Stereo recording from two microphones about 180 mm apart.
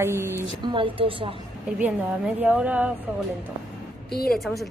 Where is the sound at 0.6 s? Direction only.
30° right (ahead or behind).